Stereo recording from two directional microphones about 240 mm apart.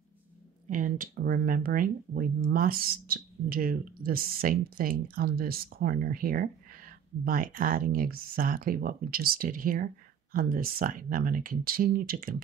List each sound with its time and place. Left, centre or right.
0.7 s speech: right